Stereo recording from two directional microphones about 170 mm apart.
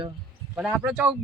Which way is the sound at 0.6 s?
5° right (ahead or behind).